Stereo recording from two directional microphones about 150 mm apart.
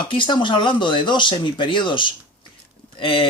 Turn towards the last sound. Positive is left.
turn(degrees=35)  # may be behind; listen again after turning